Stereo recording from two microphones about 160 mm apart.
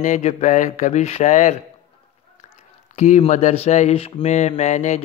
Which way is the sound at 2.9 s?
45° left (ahead or behind).